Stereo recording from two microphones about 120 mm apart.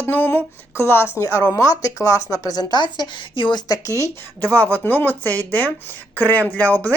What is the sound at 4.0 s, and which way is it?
Speech, 15° left (ahead or behind).